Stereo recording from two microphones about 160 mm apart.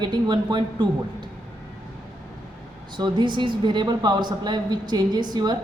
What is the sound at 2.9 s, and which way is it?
A woman's voice, 30° right (ahead or behind).